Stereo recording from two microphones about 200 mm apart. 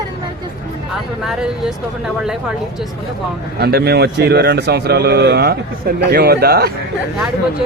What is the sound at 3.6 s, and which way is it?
A man's voice, 50° right (ahead or behind).